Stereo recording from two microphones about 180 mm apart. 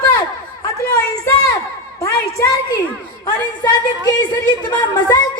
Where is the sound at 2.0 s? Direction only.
20° left (ahead or behind).